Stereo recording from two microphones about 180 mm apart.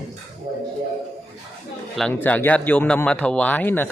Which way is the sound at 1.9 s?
5° left (ahead or behind).